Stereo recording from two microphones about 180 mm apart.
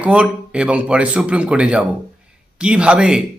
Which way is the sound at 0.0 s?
5° right (ahead or behind).